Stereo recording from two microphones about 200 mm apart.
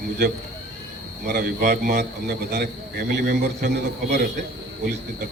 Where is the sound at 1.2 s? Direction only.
50° right (ahead or behind).